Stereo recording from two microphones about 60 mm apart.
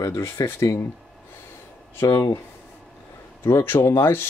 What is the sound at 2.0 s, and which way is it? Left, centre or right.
Speech, left.